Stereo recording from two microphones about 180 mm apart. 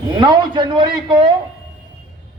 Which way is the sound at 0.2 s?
25° right (ahead or behind).